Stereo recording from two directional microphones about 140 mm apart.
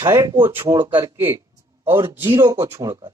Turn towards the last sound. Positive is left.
turn(degrees=-20)  # may be behind; listen again after turning